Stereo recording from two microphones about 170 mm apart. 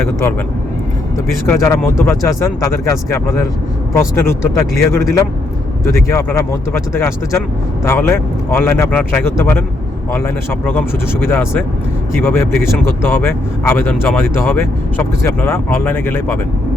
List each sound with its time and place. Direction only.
0.0 s speech: 15° left (ahead or behind)
1.5 s speech: 20° left (ahead or behind)